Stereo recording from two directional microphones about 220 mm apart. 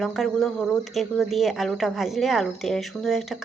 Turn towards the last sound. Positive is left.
turn(degrees=0)  # may be behind; listen again after turning